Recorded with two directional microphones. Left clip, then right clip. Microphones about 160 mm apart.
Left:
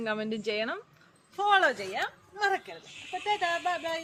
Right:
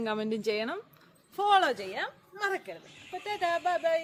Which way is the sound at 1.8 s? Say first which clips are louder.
Left 2 dB; 35° right (ahead or behind).